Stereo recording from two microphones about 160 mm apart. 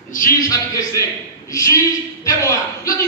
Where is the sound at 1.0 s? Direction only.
20° left (ahead or behind).